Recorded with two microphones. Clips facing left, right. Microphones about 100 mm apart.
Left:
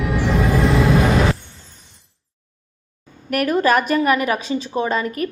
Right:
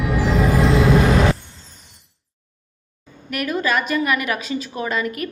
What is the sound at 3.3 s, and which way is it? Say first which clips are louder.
A woman's voice: left 5 dB; 45° left (ahead or behind).